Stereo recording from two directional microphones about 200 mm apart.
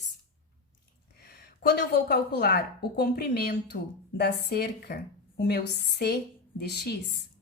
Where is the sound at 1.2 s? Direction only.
50° left (ahead or behind).